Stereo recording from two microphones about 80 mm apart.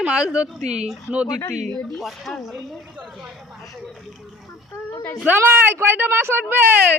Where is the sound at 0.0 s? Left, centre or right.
Centre.